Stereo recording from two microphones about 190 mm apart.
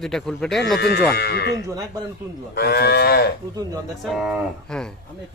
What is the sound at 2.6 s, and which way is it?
Moo, 55° left (ahead or behind).